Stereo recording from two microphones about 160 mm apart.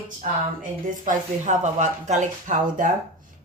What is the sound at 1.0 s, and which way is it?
Speech, 50° right (ahead or behind).